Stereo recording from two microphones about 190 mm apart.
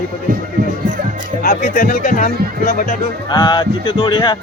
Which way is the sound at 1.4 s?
50° left (ahead or behind).